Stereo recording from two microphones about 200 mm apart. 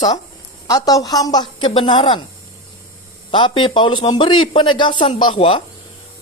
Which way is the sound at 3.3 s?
25° left (ahead or behind).